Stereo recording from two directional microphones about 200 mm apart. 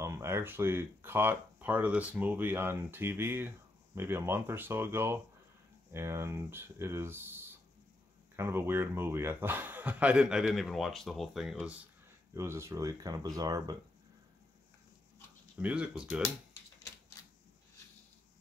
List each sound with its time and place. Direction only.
0.0 s speech: 15° right (ahead or behind)
12.4 s speech: 15° right (ahead or behind)
15.5 s speech: 5° right (ahead or behind)